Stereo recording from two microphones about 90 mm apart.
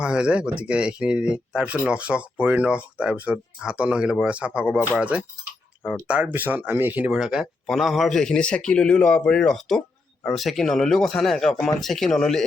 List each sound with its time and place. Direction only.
0.0 s speech: 10° right (ahead or behind)
7.1 s a man's voice: 5° right (ahead or behind)